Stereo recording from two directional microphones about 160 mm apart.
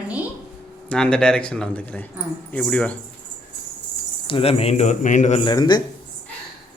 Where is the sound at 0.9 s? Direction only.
5° left (ahead or behind).